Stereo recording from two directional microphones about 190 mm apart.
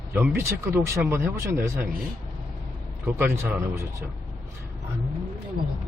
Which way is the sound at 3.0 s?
10° right (ahead or behind).